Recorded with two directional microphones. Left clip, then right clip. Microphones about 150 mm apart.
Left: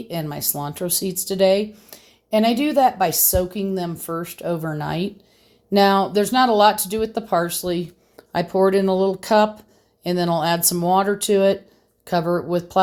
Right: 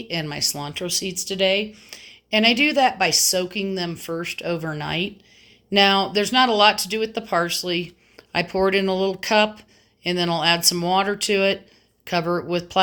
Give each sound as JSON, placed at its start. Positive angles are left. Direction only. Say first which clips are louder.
{"t": 0.1, "sound": "speech", "louder": "right 3 dB", "side_deg": 25}
{"t": 2.3, "sound": "a woman's voice", "louder": "even", "side_deg": 30}